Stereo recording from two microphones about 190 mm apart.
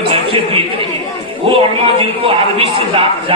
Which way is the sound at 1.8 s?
30° right (ahead or behind).